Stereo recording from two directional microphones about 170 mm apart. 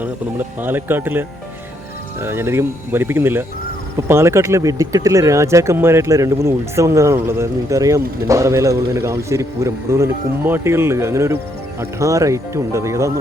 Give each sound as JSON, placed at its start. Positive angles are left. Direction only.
{"t": 0.0, "sound": "speech", "side_deg": -10}
{"t": 2.2, "sound": "speech", "side_deg": -15}